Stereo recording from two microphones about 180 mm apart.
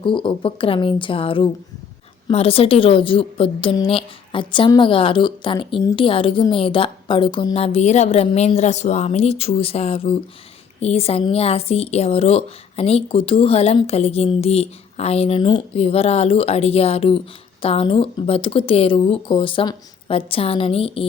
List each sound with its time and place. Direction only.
0.0 s a woman's voice: 30° left (ahead or behind)